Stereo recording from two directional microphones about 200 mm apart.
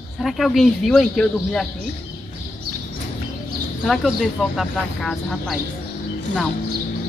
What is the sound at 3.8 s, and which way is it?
Speech, centre (ahead or behind).